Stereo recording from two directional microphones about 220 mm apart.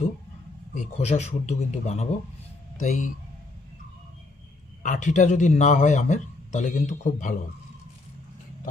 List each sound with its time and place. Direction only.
0.7 s a man's voice: 30° left (ahead or behind)
4.8 s a man's voice: 35° left (ahead or behind)